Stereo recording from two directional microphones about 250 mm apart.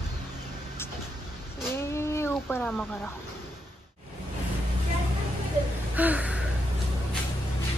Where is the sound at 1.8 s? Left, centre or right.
Centre.